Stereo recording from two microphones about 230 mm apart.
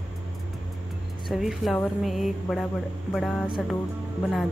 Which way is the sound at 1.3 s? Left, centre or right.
Centre.